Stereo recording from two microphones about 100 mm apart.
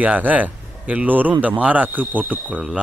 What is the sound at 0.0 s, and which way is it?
Speech, 15° right (ahead or behind).